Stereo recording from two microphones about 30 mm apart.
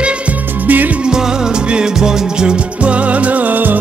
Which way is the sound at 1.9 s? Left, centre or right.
Right.